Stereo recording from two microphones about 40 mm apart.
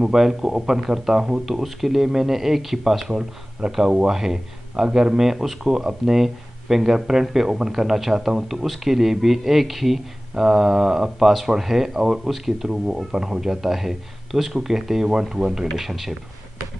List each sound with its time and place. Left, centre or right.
0.0 s speech: centre